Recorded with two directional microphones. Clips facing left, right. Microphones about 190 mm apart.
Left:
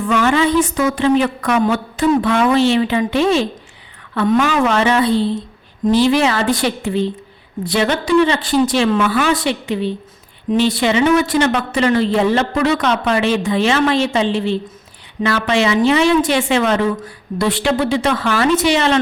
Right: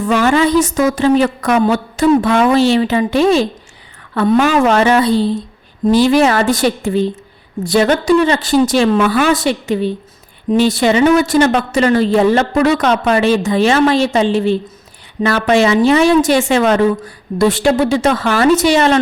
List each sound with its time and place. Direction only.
0.0 s a woman's voice: 35° right (ahead or behind)